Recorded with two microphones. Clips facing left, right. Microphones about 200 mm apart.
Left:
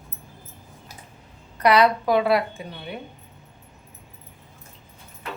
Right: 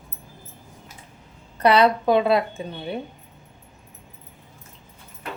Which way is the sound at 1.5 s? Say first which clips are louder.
Right 1 dB; 25° right (ahead or behind).